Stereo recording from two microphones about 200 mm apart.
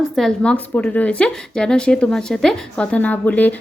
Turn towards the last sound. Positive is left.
turn(degrees=10)  # may be behind; listen again after turning